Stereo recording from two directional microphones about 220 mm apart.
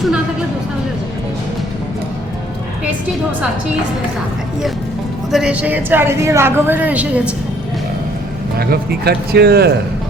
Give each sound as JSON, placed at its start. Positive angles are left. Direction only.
{"t": 5.3, "sound": "a woman's voice", "side_deg": -5}
{"t": 8.5, "sound": "speech", "side_deg": -45}